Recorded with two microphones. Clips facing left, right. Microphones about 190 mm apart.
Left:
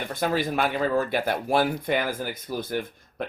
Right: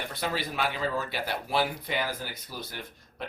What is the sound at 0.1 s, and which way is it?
Speech, 50° left (ahead or behind).